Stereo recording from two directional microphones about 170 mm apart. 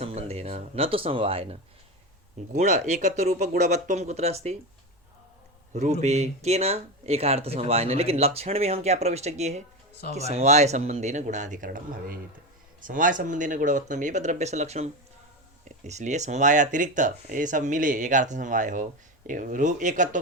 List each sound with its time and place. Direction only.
0.0 s speech: 35° right (ahead or behind)
2.6 s speech: 40° right (ahead or behind)
5.7 s speech: 40° right (ahead or behind)